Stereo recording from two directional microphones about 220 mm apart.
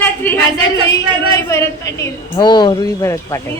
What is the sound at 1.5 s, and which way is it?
A woman's voice, 15° left (ahead or behind).